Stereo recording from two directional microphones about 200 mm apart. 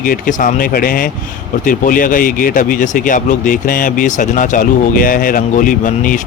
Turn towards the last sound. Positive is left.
turn(degrees=40)  # may be behind; listen again after turning